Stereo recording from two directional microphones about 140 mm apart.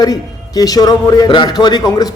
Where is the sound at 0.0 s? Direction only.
25° left (ahead or behind).